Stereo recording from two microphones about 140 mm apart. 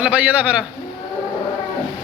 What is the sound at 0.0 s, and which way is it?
Speech, 10° right (ahead or behind).